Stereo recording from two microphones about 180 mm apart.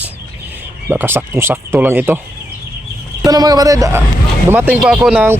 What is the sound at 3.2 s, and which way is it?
Speech, 20° right (ahead or behind).